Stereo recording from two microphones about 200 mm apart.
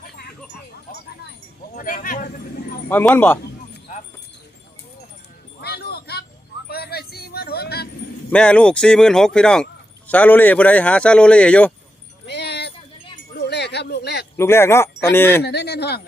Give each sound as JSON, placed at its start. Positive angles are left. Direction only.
{"t": 1.7, "sound": "speech", "side_deg": 45}
{"t": 2.9, "sound": "speech", "side_deg": 10}
{"t": 5.5, "sound": "a sound", "side_deg": 55}
{"t": 8.3, "sound": "speech", "side_deg": 5}
{"t": 12.2, "sound": "a sound", "side_deg": 55}
{"t": 14.3, "sound": "speech", "side_deg": 10}
{"t": 15.4, "sound": "speech", "side_deg": 55}